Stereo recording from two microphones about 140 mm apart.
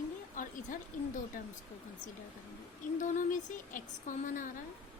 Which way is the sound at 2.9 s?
65° left (ahead or behind).